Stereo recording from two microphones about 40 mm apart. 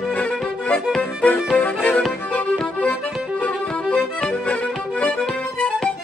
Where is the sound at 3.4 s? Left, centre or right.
Left.